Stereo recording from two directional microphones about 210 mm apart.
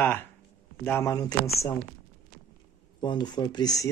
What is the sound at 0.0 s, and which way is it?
Speech, 10° left (ahead or behind).